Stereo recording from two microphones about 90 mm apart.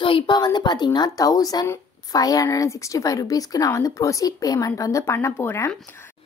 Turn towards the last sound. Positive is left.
turn(degrees=30)  # may be behind; listen again after turning